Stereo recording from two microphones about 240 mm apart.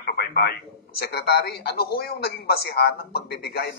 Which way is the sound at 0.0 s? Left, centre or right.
Left.